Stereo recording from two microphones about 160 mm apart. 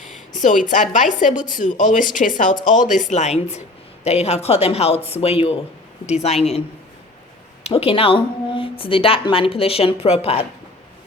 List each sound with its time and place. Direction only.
0.3 s a woman's voice: 50° left (ahead or behind)